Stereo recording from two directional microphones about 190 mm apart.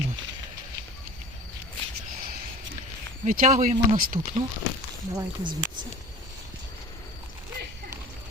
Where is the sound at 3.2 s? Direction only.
45° right (ahead or behind).